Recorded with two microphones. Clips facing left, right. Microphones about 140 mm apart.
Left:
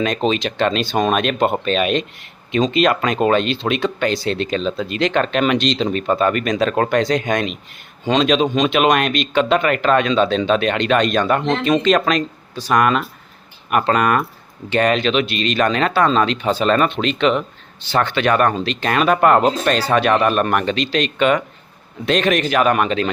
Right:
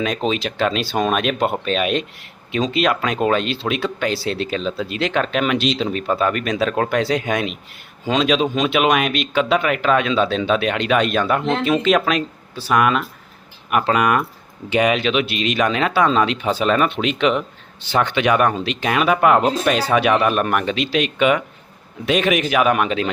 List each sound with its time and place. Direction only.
0.0 s speech: 5° right (ahead or behind)